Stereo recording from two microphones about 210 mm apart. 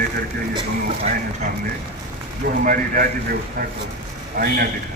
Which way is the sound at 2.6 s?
45° right (ahead or behind).